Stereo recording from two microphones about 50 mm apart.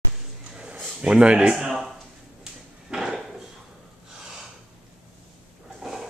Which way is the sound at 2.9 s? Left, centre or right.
Centre.